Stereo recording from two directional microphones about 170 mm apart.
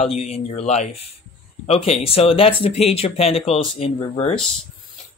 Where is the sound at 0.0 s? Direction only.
40° left (ahead or behind).